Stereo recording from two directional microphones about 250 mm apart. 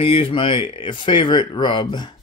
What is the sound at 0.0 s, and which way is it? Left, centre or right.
Speech, left.